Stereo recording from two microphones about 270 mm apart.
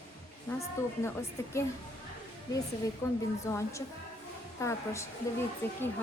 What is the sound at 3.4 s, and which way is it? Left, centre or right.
A woman's voice, centre.